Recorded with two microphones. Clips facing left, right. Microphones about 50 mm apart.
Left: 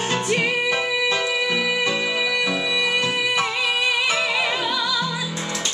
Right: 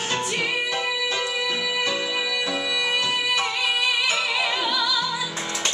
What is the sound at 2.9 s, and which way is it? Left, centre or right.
Music, centre.